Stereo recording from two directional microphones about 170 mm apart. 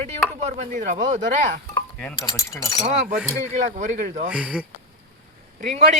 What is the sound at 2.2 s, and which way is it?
Speech, 20° left (ahead or behind).